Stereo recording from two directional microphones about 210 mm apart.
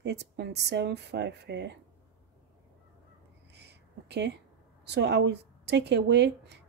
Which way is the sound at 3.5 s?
55° right (ahead or behind).